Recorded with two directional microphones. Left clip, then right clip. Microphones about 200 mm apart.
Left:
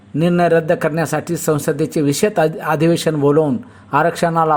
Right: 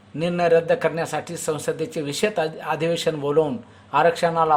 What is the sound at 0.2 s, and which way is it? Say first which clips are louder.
A man's voice: left 4 dB; 25° left (ahead or behind).